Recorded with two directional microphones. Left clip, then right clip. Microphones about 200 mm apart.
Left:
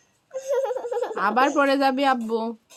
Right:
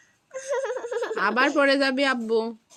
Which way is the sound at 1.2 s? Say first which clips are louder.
Left 1 dB; 5° left (ahead or behind).